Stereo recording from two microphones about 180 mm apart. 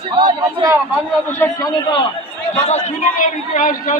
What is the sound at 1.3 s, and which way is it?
Speech, 10° left (ahead or behind).